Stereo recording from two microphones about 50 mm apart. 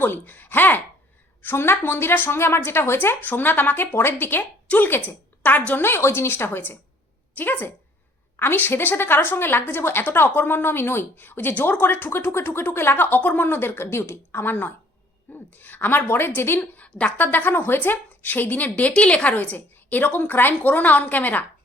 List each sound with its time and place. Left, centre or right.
0.0 s a woman's voice: left
5.8 s a woman's voice: left
17.2 s a woman's voice: left